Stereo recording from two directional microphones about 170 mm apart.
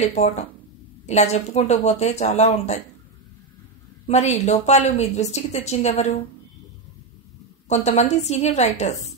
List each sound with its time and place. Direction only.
0.1 s a woman's voice: 40° left (ahead or behind)
4.1 s a woman's voice: 40° left (ahead or behind)
7.6 s a woman's voice: 40° left (ahead or behind)